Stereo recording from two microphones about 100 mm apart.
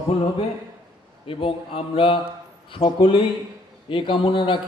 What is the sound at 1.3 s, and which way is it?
Speech, 60° left (ahead or behind).